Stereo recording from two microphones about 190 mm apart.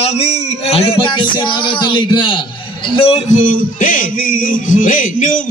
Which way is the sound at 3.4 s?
45° left (ahead or behind).